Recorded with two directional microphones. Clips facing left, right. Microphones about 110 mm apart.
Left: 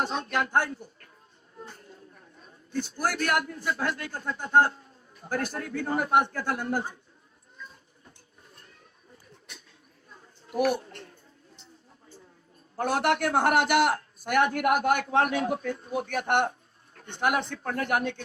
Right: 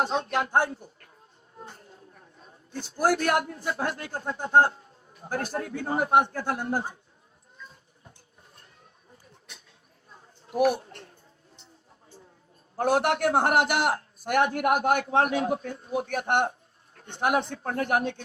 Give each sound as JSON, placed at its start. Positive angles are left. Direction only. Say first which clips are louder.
{"t": 0.0, "sound": "a man's voice", "louder": "right 2 dB", "side_deg": -25}
{"t": 2.7, "sound": "a man's voice", "louder": "right 4 dB", "side_deg": -25}
{"t": 10.5, "sound": "speech", "louder": "right 2 dB", "side_deg": -25}
{"t": 12.7, "sound": "a man's voice", "louder": "right 2 dB", "side_deg": -25}